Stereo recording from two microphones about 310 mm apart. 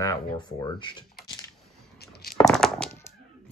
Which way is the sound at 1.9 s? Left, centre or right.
Left.